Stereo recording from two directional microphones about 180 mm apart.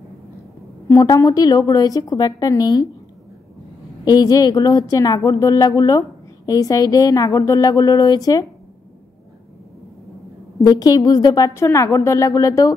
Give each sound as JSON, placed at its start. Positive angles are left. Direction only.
{"t": 0.8, "sound": "a woman's voice", "side_deg": 20}
{"t": 4.0, "sound": "a woman's voice", "side_deg": 20}
{"t": 10.6, "sound": "a woman's voice", "side_deg": 20}